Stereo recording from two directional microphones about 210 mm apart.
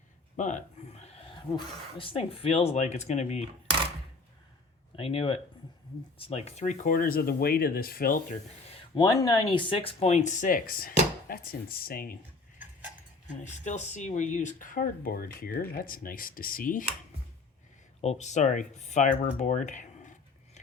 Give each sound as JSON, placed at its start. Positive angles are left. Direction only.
{"t": 0.3, "sound": "speech", "side_deg": 35}
{"t": 4.9, "sound": "speech", "side_deg": 25}
{"t": 8.7, "sound": "speech", "side_deg": 20}
{"t": 13.4, "sound": "speech", "side_deg": 35}
{"t": 18.0, "sound": "speech", "side_deg": 30}